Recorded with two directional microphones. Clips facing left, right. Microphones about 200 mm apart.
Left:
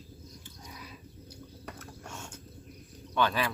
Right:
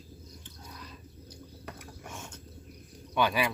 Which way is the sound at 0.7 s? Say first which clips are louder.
Left 1 dB; 10° left (ahead or behind).